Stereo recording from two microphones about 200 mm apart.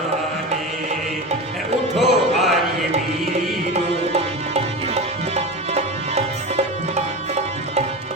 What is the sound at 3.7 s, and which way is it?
Music, 30° right (ahead or behind).